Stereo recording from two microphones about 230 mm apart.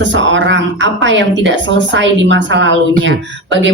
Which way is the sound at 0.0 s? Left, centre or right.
Right.